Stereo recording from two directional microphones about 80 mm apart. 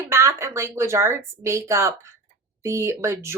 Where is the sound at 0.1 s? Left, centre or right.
Right.